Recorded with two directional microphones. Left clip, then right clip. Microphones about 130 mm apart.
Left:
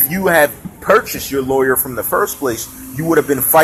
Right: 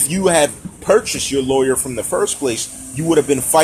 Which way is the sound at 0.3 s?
40° right (ahead or behind).